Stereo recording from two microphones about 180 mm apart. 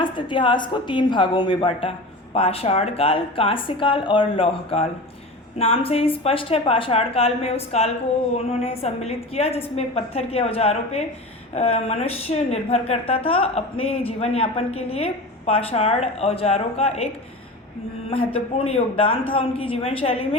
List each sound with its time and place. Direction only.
0.0 s a woman's voice: 25° left (ahead or behind)
18.3 s a woman's voice: 35° left (ahead or behind)